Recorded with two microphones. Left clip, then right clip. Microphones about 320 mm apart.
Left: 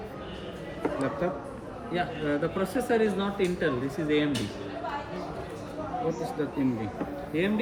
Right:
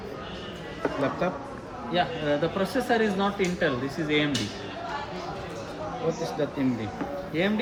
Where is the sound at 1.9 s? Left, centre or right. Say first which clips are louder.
Right 4 dB; centre.